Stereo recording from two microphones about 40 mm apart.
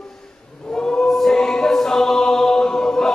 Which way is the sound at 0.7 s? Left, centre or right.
Centre.